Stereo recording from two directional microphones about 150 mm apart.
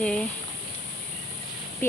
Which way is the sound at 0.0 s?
5° left (ahead or behind).